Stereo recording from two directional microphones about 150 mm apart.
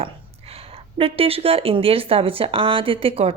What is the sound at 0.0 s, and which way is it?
Speech, 40° right (ahead or behind).